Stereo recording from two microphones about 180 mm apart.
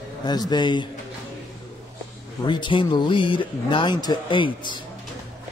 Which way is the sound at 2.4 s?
25° left (ahead or behind).